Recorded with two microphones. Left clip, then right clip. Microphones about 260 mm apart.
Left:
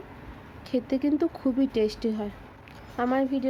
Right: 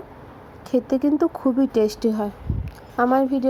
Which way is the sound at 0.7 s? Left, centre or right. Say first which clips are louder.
Right 6 dB; centre.